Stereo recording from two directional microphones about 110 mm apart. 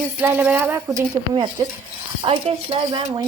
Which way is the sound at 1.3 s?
40° right (ahead or behind).